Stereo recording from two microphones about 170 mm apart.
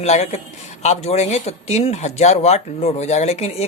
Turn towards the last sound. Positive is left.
turn(degrees=40)  # may be behind; listen again after turning